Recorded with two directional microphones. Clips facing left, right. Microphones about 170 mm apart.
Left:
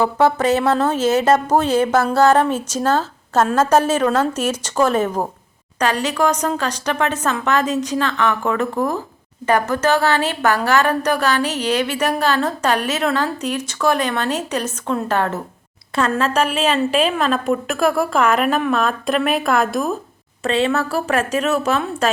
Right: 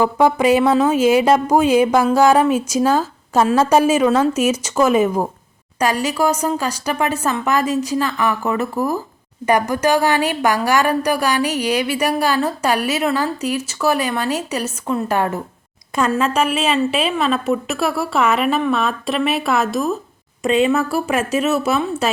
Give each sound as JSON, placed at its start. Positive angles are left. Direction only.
{"t": 0.0, "sound": "a woman's voice", "side_deg": -10}
{"t": 20.4, "sound": "a woman's voice", "side_deg": -10}